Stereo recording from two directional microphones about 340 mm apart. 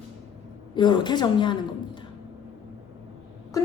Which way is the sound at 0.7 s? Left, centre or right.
Centre.